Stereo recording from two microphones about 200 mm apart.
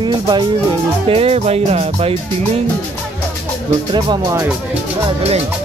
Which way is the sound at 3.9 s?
20° right (ahead or behind).